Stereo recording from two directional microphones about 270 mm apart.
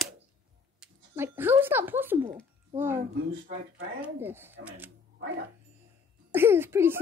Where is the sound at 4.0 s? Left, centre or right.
Centre.